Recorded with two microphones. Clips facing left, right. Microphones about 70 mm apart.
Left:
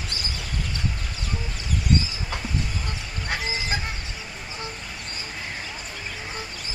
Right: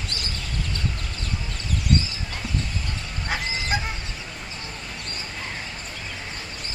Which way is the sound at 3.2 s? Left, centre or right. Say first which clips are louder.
Right 1 dB; centre.